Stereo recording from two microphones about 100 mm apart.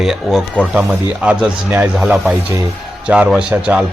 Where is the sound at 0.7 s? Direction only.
10° right (ahead or behind).